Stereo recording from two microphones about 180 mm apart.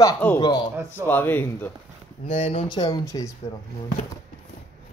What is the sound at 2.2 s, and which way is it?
Speech, 35° left (ahead or behind).